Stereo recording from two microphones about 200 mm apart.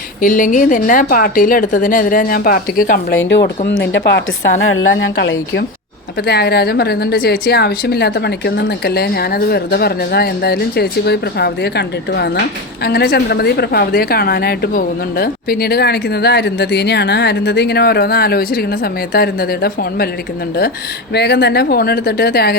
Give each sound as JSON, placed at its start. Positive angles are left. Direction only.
{"t": 0.2, "sound": "a woman's voice", "side_deg": 40}
{"t": 3.7, "sound": "a woman's voice", "side_deg": 60}
{"t": 21.1, "sound": "a woman's voice", "side_deg": 55}